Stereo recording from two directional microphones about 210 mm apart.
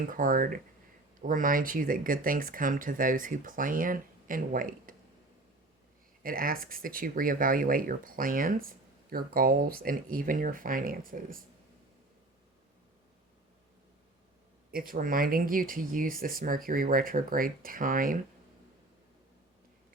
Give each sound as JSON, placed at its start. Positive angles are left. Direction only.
{"t": 0.1, "sound": "speech", "side_deg": -40}
{"t": 6.2, "sound": "speech", "side_deg": -40}
{"t": 14.7, "sound": "speech", "side_deg": -45}